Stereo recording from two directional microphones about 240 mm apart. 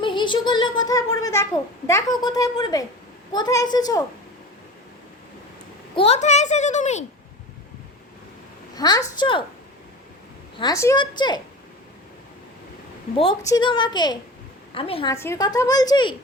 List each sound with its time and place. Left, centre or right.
0.0 s speech: centre
6.0 s a woman's voice: left
8.7 s a child's voice: centre
10.6 s speech: centre
13.1 s a woman's voice: centre
15.1 s speech: centre